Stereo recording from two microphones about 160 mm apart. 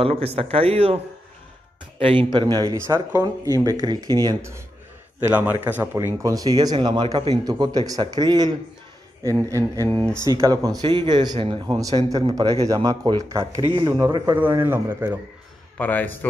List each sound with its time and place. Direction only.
0.0 s speech: 35° right (ahead or behind)
2.0 s a man's voice: 35° right (ahead or behind); by 5.5 s 10° right (ahead or behind)
6.1 s speech: 20° right (ahead or behind)
14.4 s a man's voice: 15° right (ahead or behind)
15.8 s a man's voice: 10° left (ahead or behind)